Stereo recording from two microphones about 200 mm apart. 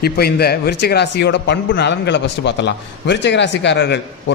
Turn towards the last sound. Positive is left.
turn(degrees=60)  # may be behind; listen again after turning